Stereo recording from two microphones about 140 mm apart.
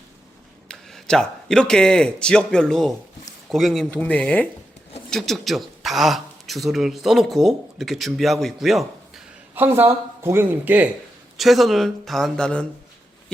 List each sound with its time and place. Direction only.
0.7 s speech: 5° left (ahead or behind)
9.6 s speech: 15° right (ahead or behind)
11.3 s speech: centre (ahead or behind)